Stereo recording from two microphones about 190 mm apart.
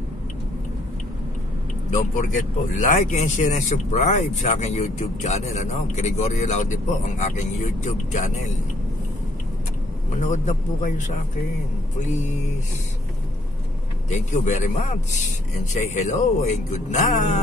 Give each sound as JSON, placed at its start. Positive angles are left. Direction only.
{"t": 2.7, "sound": "speech", "side_deg": 40}
{"t": 10.2, "sound": "speech", "side_deg": 40}
{"t": 14.1, "sound": "speech", "side_deg": 40}